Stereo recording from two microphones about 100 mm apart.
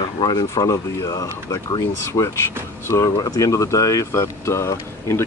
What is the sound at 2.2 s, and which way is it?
Speech, 50° left (ahead or behind).